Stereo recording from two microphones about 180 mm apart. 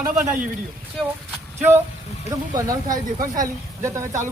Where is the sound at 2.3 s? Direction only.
20° right (ahead or behind).